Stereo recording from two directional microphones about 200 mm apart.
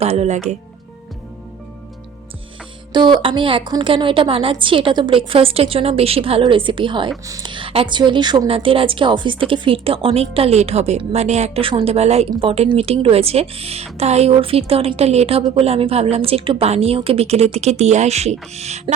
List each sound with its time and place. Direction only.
0.0 s speech: 30° right (ahead or behind)
2.9 s a woman's voice: 25° right (ahead or behind)